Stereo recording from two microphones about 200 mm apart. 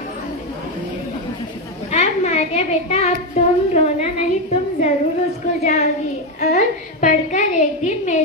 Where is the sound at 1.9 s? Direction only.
35° left (ahead or behind).